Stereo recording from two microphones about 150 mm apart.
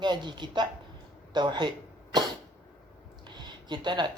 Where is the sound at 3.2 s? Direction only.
30° right (ahead or behind).